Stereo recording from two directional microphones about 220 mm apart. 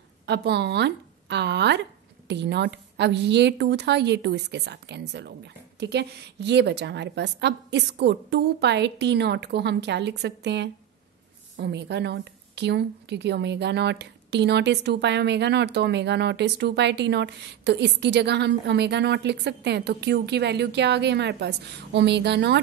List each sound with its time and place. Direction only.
0.3 s a woman's voice: 50° right (ahead or behind)